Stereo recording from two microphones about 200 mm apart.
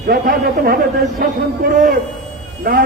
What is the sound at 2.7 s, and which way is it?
Speech, 50° right (ahead or behind).